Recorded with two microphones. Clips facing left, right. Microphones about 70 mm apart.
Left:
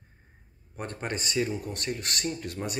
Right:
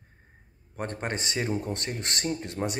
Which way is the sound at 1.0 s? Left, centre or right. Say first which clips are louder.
Left 2 dB; right.